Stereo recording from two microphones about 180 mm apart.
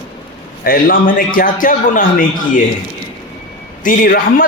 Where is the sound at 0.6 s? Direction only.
55° left (ahead or behind).